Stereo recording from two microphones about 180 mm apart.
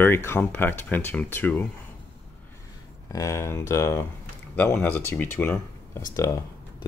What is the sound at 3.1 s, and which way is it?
Speech, 15° left (ahead or behind).